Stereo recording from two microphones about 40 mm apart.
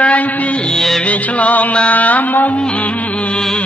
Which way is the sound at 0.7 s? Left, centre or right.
Centre.